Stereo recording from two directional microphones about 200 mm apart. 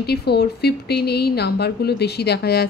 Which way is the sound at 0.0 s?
55° left (ahead or behind).